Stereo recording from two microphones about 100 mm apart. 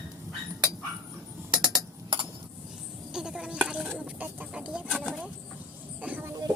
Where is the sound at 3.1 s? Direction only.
5° right (ahead or behind).